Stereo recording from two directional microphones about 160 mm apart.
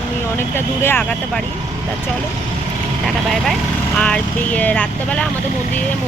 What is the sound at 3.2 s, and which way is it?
Speech, centre (ahead or behind).